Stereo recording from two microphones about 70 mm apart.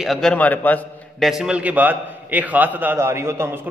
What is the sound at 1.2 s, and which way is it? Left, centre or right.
Speech, centre.